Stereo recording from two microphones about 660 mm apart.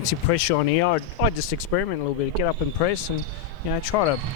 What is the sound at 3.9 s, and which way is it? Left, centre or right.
Speech, left.